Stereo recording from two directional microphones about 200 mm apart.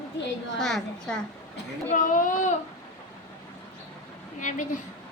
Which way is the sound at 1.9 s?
40° left (ahead or behind).